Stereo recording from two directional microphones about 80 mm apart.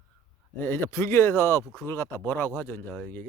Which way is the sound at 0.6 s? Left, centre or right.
Left.